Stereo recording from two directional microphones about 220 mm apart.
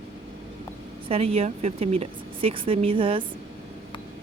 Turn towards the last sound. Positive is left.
turn(degrees=-25)  # may be behind; listen again after turning